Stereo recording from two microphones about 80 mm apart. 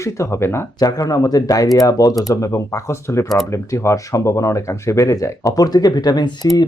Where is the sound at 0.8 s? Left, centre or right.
Left.